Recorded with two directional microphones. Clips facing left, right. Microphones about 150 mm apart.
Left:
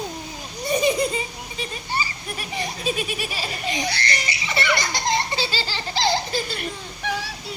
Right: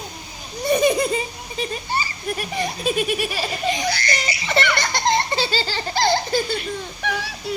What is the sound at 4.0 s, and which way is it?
Giggle, 30° left (ahead or behind).